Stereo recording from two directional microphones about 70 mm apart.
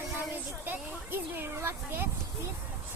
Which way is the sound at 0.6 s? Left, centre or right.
Right.